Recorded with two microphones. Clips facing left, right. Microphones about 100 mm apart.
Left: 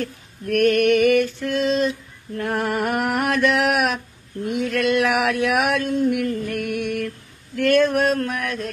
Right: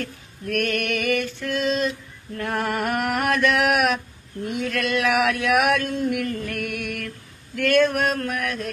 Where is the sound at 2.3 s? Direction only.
10° left (ahead or behind).